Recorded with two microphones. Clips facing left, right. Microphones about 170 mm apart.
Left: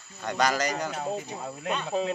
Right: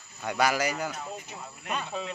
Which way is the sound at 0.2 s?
10° right (ahead or behind).